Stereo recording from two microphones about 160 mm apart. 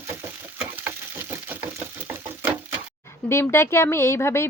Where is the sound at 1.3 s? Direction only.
15° right (ahead or behind).